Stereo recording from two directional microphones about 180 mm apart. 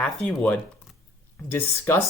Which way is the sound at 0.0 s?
10° left (ahead or behind).